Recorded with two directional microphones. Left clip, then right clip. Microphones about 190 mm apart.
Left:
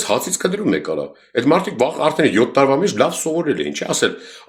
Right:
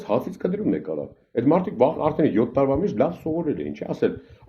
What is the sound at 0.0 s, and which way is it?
Speech, 20° left (ahead or behind).